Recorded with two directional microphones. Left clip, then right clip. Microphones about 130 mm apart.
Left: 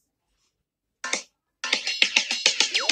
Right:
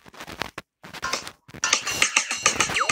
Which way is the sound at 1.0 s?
55° left (ahead or behind).